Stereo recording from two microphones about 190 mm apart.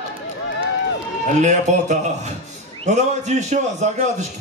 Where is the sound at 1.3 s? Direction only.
40° right (ahead or behind).